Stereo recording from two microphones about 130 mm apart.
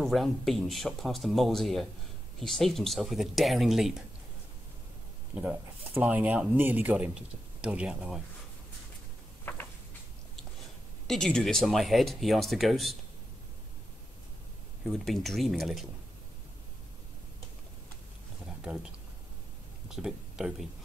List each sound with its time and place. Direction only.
0.0 s speech: centre (ahead or behind)
5.3 s speech: 15° right (ahead or behind)
9.4 s a sound: 15° left (ahead or behind)
11.1 s speech: 5° left (ahead or behind)
14.9 s speech: centre (ahead or behind)
18.6 s speech: 5° right (ahead or behind)
19.9 s speech: 5° right (ahead or behind)